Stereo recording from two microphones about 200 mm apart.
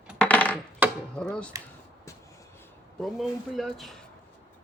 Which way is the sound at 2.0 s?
15° left (ahead or behind).